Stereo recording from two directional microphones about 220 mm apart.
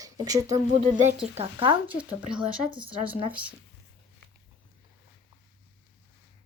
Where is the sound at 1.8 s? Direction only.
5° right (ahead or behind).